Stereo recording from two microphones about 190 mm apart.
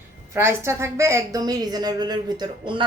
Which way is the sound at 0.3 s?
15° right (ahead or behind).